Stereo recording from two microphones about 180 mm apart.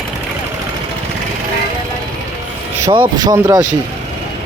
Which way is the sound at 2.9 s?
25° right (ahead or behind).